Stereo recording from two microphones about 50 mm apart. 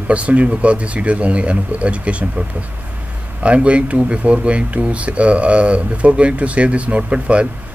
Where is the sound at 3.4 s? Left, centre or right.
Right.